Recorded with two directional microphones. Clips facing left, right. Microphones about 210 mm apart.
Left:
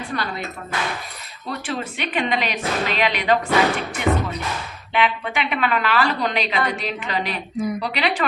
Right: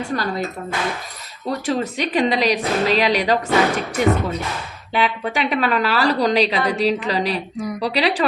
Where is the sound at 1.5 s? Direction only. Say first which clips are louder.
Right 6 dB; 40° right (ahead or behind).